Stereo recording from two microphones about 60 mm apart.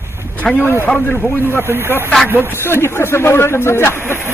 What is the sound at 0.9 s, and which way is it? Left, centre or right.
Speech, left.